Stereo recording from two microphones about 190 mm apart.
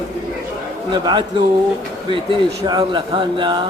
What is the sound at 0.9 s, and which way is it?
Speech, 25° right (ahead or behind).